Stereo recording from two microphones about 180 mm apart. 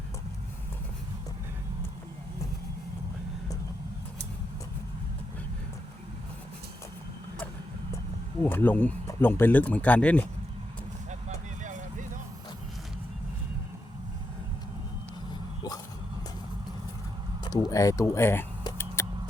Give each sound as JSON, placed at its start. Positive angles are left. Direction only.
{"t": 8.4, "sound": "speech", "side_deg": 10}
{"t": 11.6, "sound": "vehicle", "side_deg": -45}
{"t": 17.4, "sound": "a sound", "side_deg": 20}